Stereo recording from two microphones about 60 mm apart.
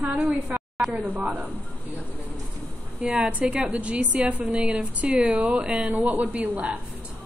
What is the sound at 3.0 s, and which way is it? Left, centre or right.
A woman's voice, centre.